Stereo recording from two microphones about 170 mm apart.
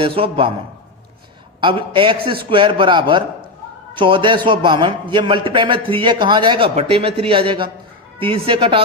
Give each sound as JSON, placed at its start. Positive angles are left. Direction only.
{"t": 0.2, "sound": "a man's voice", "side_deg": -30}
{"t": 1.6, "sound": "a man's voice", "side_deg": -30}